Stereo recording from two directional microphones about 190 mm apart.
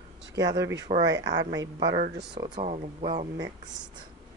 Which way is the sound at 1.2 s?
70° right (ahead or behind).